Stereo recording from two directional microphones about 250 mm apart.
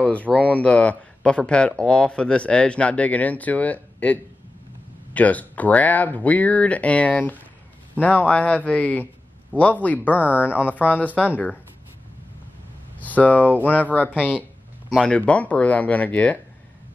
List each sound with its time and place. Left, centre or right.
0.0 s speech: centre
13.0 s speech: centre